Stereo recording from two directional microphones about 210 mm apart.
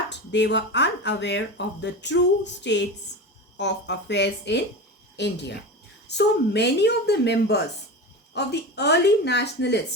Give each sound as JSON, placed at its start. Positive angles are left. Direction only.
{"t": 0.1, "sound": "speech", "side_deg": 55}